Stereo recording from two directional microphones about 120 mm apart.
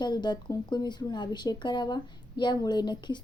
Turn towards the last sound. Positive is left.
turn(degrees=40)  # may be behind; listen again after turning